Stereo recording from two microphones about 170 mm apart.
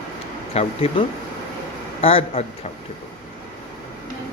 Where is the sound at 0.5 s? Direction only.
35° left (ahead or behind).